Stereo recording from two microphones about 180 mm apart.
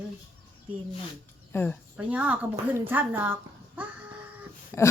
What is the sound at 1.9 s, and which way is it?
Speech, 10° right (ahead or behind).